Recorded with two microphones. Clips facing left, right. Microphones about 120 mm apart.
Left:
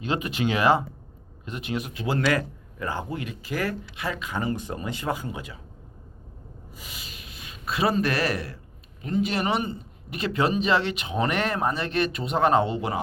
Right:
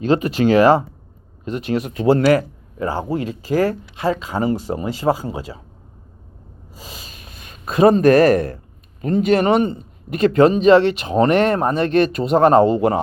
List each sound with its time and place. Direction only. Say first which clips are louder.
0.0 s speech: right 10 dB; 40° right (ahead or behind)
6.7 s speech: right 6 dB; 40° right (ahead or behind)